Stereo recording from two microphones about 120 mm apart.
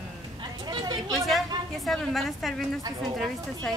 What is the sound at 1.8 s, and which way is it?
Speech, centre (ahead or behind).